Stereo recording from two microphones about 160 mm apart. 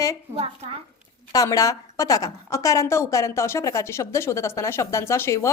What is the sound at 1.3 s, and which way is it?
A woman's voice, 20° left (ahead or behind).